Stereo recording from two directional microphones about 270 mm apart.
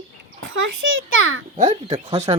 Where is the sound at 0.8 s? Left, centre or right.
Right.